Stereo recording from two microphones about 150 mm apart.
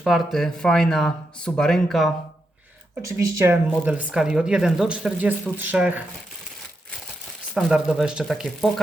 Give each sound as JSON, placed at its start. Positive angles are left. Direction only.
{"t": 0.0, "sound": "speech", "side_deg": 0}
{"t": 3.0, "sound": "speech", "side_deg": -20}
{"t": 7.5, "sound": "speech", "side_deg": -5}